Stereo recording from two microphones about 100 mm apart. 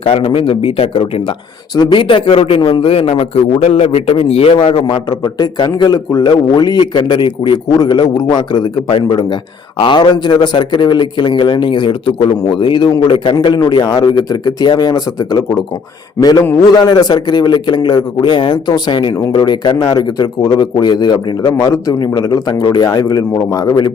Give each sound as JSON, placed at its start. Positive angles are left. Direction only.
{"t": 0.0, "sound": "a man's voice", "side_deg": 70}
{"t": 1.7, "sound": "a man's voice", "side_deg": 50}
{"t": 4.5, "sound": "speech", "side_deg": 65}
{"t": 5.0, "sound": "a man's voice", "side_deg": 45}
{"t": 16.7, "sound": "a man's voice", "side_deg": 40}
{"t": 21.4, "sound": "a man's voice", "side_deg": 35}